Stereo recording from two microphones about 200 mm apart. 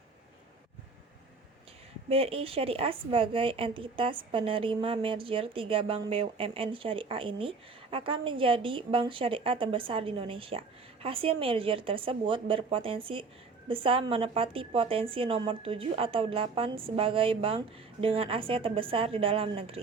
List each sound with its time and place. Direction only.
2.0 s a woman's voice: 30° right (ahead or behind)